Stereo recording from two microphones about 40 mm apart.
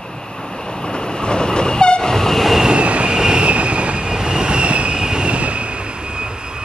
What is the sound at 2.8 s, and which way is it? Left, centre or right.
Train, right.